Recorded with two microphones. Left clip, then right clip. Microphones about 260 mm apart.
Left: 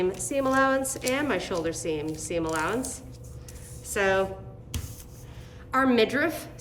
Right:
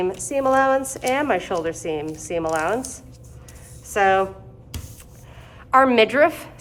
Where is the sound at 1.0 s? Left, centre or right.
Centre.